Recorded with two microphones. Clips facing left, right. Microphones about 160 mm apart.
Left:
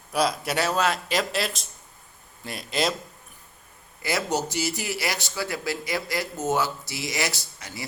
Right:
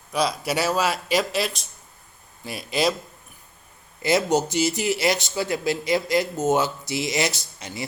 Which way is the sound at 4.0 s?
20° right (ahead or behind).